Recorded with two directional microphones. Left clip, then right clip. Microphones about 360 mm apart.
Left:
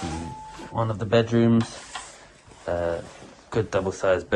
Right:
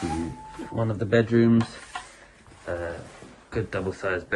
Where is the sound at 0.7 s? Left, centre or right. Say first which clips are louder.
Left 1 dB; left.